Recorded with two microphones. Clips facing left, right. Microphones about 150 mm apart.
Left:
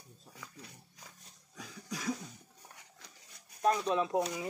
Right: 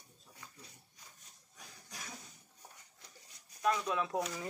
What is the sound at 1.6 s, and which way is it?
Cough, 90° left.